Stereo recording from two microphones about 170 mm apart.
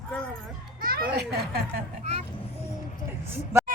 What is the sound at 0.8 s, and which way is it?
A child's voice, 60° right (ahead or behind).